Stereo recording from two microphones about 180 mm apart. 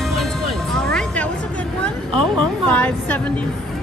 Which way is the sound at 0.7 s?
5° left (ahead or behind).